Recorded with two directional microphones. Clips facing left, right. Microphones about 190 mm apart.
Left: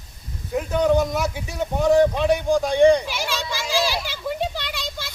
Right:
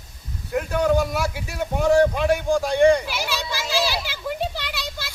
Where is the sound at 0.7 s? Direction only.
20° left (ahead or behind).